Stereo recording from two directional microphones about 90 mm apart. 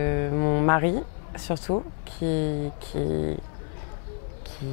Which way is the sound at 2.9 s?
25° left (ahead or behind).